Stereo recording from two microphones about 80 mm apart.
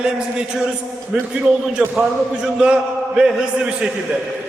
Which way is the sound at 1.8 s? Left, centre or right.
Centre.